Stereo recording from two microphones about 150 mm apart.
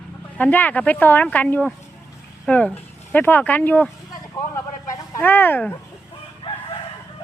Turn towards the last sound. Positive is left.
turn(degrees=40)  # may be behind; listen again after turning